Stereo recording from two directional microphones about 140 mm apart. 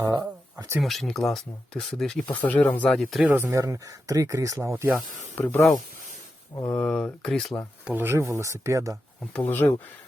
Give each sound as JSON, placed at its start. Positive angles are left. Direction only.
{"t": 0.8, "sound": "speech", "side_deg": 0}
{"t": 3.2, "sound": "speech", "side_deg": -15}
{"t": 5.3, "sound": "speech", "side_deg": 15}
{"t": 6.7, "sound": "speech", "side_deg": 5}
{"t": 7.9, "sound": "speech", "side_deg": -15}
{"t": 9.2, "sound": "speech", "side_deg": 10}